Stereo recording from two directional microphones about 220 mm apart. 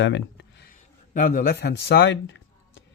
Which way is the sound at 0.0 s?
55° left (ahead or behind).